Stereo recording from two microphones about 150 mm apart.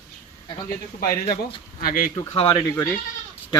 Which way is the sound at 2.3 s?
40° left (ahead or behind).